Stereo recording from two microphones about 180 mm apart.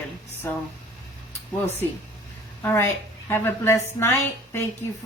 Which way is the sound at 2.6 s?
15° left (ahead or behind).